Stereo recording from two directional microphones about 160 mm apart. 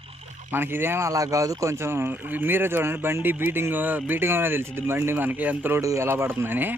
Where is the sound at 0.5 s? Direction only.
15° right (ahead or behind).